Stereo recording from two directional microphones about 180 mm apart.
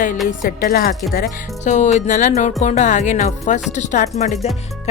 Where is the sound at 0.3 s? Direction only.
55° left (ahead or behind).